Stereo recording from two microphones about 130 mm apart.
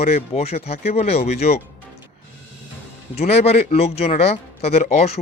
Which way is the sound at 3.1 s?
50° left (ahead or behind).